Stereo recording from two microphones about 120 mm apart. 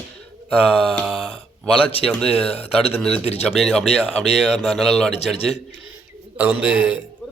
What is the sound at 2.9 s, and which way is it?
Speech, 5° left (ahead or behind).